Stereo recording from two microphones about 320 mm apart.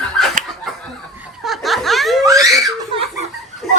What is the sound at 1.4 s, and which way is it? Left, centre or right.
Laughter, centre.